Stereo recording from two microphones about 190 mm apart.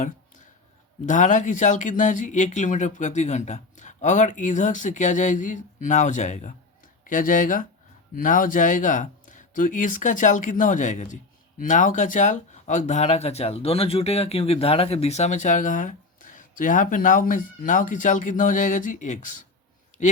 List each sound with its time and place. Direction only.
1.0 s speech: 40° left (ahead or behind)